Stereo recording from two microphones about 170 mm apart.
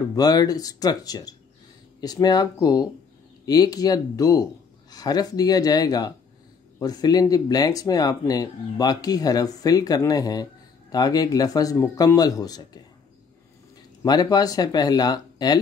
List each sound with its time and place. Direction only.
0.1 s speech: 20° left (ahead or behind)
14.0 s speech: 25° left (ahead or behind)